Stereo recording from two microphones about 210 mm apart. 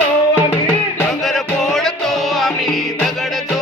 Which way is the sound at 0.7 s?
5° left (ahead or behind).